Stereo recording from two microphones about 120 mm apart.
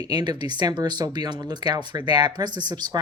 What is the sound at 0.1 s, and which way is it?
Speech, 35° right (ahead or behind).